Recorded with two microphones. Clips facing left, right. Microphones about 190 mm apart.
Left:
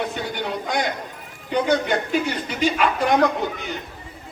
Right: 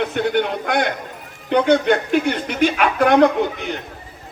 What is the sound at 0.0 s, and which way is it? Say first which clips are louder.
Speech: right 7 dB; 65° right (ahead or behind).